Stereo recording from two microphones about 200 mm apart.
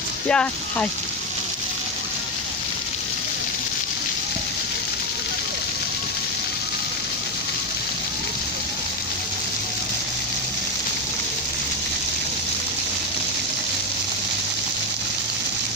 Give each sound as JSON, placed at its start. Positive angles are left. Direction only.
{"t": 0.3, "sound": "speech", "side_deg": 5}